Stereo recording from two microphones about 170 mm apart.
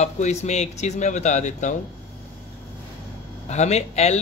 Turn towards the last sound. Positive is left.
turn(degrees=40)  # may be behind; listen again after turning